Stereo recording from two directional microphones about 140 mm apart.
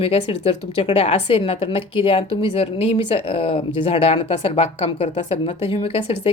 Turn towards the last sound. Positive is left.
turn(degrees=45)  # may be behind; listen again after turning